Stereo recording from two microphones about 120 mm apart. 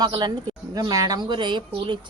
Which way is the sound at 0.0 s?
40° right (ahead or behind).